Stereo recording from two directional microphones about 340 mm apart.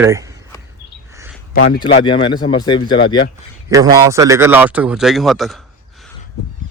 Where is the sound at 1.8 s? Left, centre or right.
Centre.